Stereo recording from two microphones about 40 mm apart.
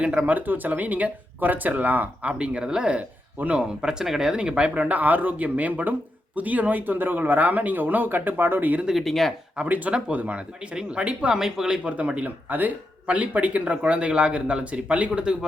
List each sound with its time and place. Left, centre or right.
0.0 s speech: right
0.3 s speech: right
2.4 s speech: right
9.0 s speech: centre
9.6 s speech: right
11.3 s speech: centre
11.8 s speech: right
12.5 s speech: right
15.2 s speech: right